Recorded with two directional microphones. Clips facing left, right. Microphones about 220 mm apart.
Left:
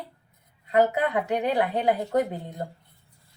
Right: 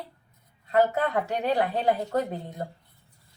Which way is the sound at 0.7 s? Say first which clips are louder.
Left 1 dB; 15° left (ahead or behind).